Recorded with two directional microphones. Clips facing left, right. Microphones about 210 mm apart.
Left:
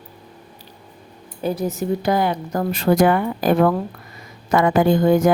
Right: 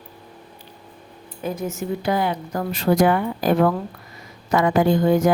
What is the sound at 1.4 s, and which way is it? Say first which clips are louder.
Speech: left 4 dB; 35° left (ahead or behind).